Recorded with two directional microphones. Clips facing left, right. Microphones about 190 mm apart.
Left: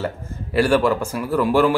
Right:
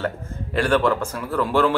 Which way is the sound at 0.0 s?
5° left (ahead or behind).